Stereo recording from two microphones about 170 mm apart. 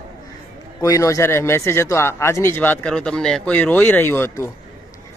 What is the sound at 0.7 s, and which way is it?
Speech, 20° left (ahead or behind).